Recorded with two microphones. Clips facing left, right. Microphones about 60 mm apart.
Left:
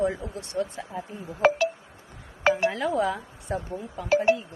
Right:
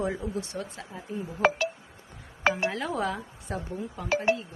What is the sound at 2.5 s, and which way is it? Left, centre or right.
Speech, centre.